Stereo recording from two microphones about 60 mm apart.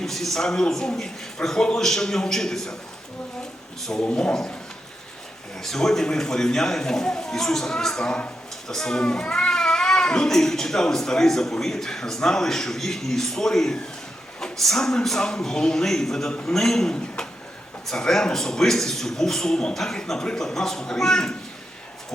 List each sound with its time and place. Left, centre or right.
0.0 s speech: centre
4.0 s speech: centre
5.6 s speech: centre